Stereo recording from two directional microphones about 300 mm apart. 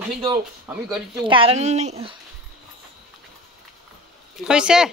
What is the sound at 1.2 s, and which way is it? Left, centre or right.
Speech, centre.